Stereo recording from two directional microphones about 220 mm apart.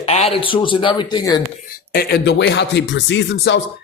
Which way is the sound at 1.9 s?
45° left (ahead or behind).